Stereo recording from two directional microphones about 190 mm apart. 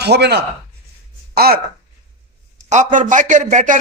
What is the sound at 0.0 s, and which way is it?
Speech, 60° right (ahead or behind).